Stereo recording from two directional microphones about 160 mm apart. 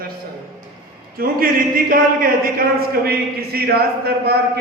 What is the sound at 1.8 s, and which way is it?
Speech, 65° right (ahead or behind).